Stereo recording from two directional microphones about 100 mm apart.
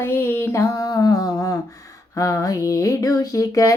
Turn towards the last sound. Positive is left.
turn(degrees=35)  # may be behind; listen again after turning